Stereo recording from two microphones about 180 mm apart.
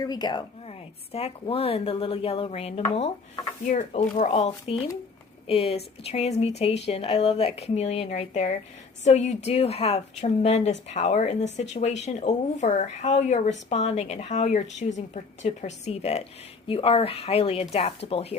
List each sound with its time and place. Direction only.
0.0 s a woman's voice: 25° left (ahead or behind)